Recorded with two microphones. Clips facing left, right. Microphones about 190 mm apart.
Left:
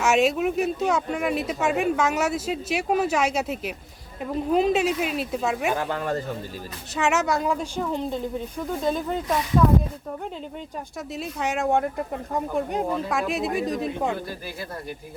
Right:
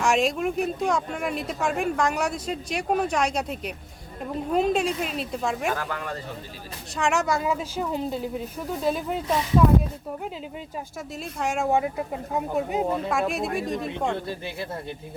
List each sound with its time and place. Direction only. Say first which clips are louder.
0.0 s speech: left 2 dB; 5° left (ahead or behind)
5.7 s speech: left 4 dB; 25° left (ahead or behind)
6.0 s speech: left 7 dB; 45° left (ahead or behind)
6.9 s speech: left 1 dB; centre (ahead or behind)
11.1 s speech: left 1 dB; centre (ahead or behind)